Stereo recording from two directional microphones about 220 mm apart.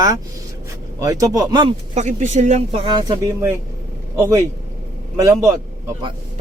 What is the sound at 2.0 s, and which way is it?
Speech, 30° right (ahead or behind).